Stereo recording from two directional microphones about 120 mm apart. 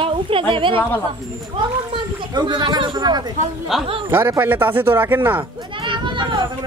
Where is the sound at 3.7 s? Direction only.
5° right (ahead or behind).